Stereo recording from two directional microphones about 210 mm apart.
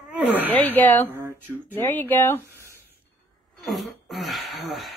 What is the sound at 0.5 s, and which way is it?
Speech, 10° left (ahead or behind).